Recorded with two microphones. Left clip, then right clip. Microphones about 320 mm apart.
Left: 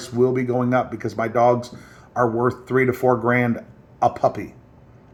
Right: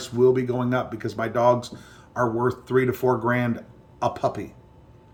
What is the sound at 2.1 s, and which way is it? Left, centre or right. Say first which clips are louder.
Speech: left 4 dB; right.